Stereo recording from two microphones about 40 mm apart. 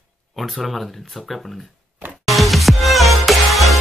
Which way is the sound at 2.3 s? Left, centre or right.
Centre.